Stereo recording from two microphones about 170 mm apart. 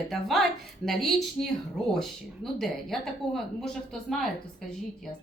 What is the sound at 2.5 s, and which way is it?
Speech, centre (ahead or behind).